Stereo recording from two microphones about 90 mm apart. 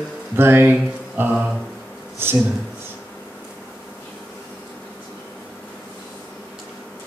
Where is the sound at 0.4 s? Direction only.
25° right (ahead or behind).